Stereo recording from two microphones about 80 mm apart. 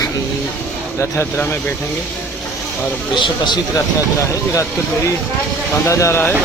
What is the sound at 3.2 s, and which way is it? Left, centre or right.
Speech, left.